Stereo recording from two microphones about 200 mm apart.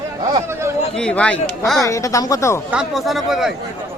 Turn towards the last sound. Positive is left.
turn(degrees=0)  # may be behind; listen again after turning